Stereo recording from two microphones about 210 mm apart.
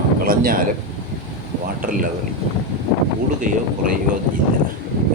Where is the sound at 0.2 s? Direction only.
45° right (ahead or behind).